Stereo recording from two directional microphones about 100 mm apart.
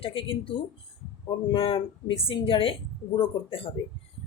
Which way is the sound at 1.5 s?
60° left (ahead or behind).